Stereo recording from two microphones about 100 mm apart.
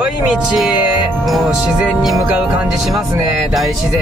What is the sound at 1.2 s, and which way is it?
Speech, centre (ahead or behind).